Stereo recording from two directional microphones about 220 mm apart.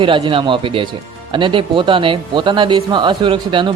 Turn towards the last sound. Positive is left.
turn(degrees=-20)  # may be behind; listen again after turning